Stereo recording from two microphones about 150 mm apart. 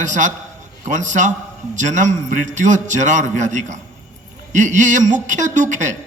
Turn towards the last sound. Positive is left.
turn(degrees=-55)  # may be behind; listen again after turning